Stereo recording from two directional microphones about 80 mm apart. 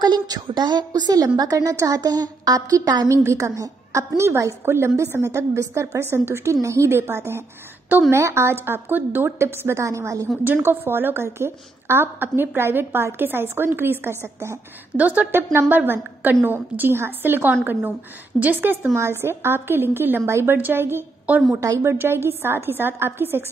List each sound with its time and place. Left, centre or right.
0.0 s a woman's voice: right
3.1 s a woman's voice: right
9.8 s a woman's voice: right
10.4 s a woman's voice: right
15.0 s a woman's voice: right
21.5 s a woman's voice: right